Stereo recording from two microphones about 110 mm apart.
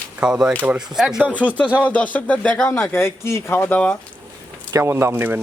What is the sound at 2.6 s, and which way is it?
Speech, 20° left (ahead or behind).